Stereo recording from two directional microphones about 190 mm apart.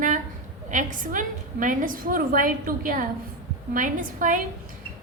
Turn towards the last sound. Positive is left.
turn(degrees=-45)  # may be behind; listen again after turning